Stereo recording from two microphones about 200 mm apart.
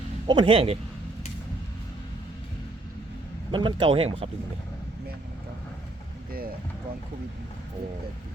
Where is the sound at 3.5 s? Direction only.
25° right (ahead or behind).